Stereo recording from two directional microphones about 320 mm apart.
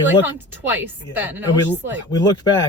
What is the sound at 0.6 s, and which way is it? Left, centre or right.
Speech, centre.